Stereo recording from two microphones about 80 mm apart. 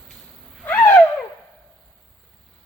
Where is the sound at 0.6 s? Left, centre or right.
Centre.